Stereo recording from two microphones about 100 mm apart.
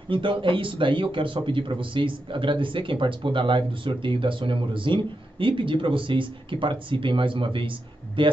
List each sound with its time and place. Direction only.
0.1 s speech: 60° right (ahead or behind)